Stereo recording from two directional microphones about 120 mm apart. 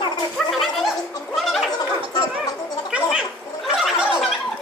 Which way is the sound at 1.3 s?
Centre (ahead or behind).